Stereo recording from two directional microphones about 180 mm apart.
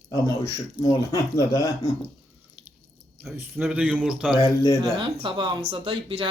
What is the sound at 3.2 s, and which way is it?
Speech, 10° right (ahead or behind).